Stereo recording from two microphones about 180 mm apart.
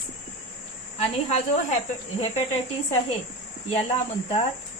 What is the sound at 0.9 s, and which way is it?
Speech, 35° left (ahead or behind).